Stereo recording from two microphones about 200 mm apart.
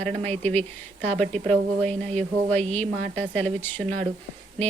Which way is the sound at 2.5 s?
5° left (ahead or behind).